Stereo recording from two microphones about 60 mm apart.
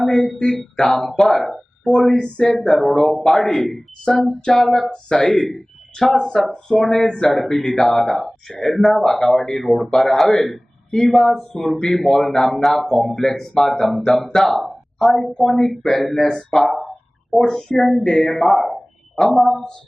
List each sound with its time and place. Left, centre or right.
0.1 s speech: centre
5.5 s speech: centre
6.1 s a man's voice: centre